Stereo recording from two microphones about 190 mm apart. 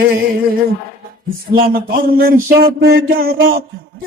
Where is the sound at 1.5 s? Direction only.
50° right (ahead or behind).